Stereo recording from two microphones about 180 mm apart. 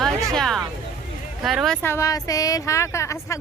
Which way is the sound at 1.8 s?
15° left (ahead or behind).